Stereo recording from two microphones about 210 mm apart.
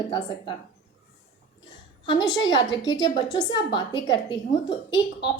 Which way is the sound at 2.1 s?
60° left (ahead or behind).